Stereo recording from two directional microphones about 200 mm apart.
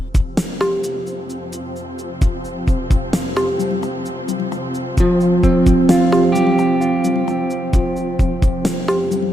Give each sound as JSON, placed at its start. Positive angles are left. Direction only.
{"t": 0.3, "sound": "music", "side_deg": 0}
{"t": 2.6, "sound": "music", "side_deg": 0}
{"t": 5.0, "sound": "music", "side_deg": 0}